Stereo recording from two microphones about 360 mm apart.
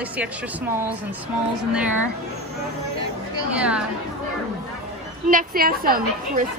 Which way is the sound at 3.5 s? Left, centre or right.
Centre.